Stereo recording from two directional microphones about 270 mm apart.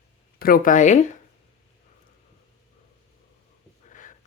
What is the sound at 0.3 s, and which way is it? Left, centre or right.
Speech, left.